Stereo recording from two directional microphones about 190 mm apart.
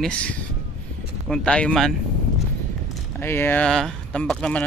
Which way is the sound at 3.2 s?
10° left (ahead or behind).